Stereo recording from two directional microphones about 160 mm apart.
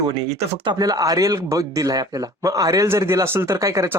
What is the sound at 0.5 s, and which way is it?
Speech, 30° right (ahead or behind).